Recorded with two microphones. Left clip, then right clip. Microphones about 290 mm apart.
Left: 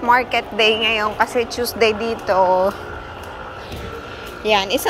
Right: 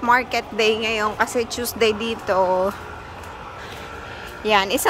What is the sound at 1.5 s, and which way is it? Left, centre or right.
A woman's voice, right.